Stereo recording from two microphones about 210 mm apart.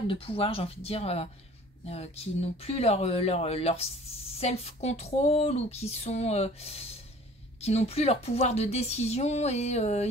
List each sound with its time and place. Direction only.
0.1 s speech: 25° left (ahead or behind)